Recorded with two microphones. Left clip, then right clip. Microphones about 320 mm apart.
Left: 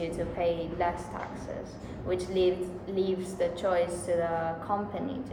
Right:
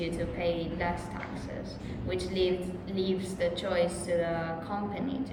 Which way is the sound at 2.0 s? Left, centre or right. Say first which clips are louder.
Left 3 dB; centre.